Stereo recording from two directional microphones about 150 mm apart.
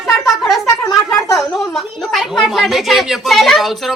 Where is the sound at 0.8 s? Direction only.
20° left (ahead or behind).